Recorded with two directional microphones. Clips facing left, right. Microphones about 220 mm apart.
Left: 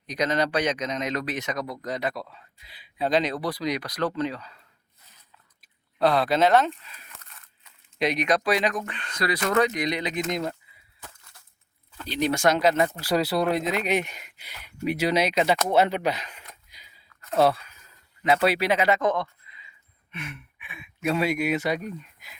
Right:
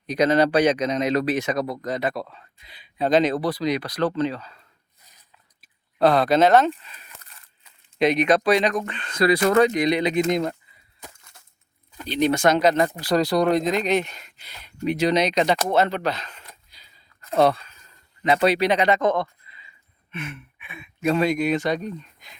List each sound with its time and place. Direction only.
0.3 s speech: 35° right (ahead or behind)
1.8 s speech: 50° right (ahead or behind)
2.6 s speech: 5° left (ahead or behind)
3.1 s speech: 50° right (ahead or behind)
3.4 s speech: 30° right (ahead or behind)
6.0 s speech: 45° right (ahead or behind)
7.3 s crumpling: centre (ahead or behind)
8.4 s speech: 5° left (ahead or behind)
9.0 s speech: 30° right (ahead or behind)
12.0 s speech: centre (ahead or behind)
16.6 s a sound: 15° left (ahead or behind)
18.4 s speech: 5° left (ahead or behind)
20.1 s speech: 5° left (ahead or behind)